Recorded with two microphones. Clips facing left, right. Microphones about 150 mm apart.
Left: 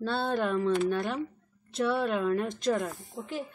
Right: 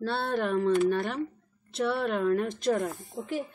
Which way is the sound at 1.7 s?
Centre (ahead or behind).